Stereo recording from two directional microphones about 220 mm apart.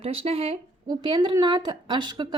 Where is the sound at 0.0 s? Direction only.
25° right (ahead or behind).